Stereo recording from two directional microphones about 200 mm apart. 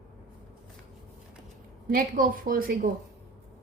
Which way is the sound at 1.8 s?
45° right (ahead or behind).